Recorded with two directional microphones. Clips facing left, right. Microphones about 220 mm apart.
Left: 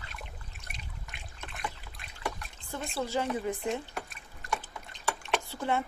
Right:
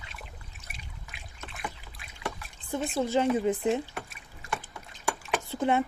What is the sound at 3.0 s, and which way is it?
Speech, 20° right (ahead or behind).